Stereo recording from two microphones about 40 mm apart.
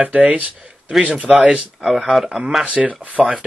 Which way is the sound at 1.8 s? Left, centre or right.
Centre.